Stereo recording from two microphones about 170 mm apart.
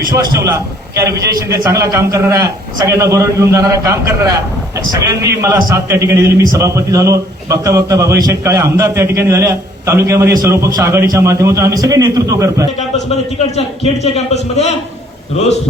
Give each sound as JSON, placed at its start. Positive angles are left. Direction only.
{"t": 0.4, "sound": "a man's voice", "side_deg": -20}
{"t": 13.4, "sound": "a man's voice", "side_deg": 35}